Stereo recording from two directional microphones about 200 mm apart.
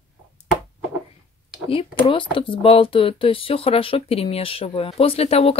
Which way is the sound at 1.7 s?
25° left (ahead or behind).